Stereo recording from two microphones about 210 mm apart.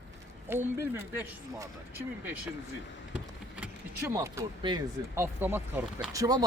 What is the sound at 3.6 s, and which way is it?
Speech, 10° right (ahead or behind).